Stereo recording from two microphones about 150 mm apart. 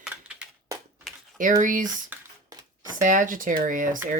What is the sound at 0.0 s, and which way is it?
Typewriter, 5° right (ahead or behind).